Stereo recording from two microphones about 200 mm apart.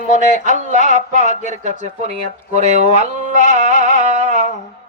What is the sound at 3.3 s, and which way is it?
Music, 35° right (ahead or behind).